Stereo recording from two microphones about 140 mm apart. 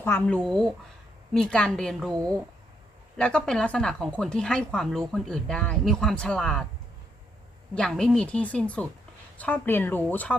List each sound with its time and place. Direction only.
0.0 s speech: 15° left (ahead or behind)
0.4 s speech: centre (ahead or behind)
3.2 s speech: 5° left (ahead or behind)
7.8 s speech: 5° left (ahead or behind)